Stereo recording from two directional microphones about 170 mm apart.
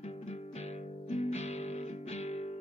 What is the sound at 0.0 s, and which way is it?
Music, 40° left (ahead or behind).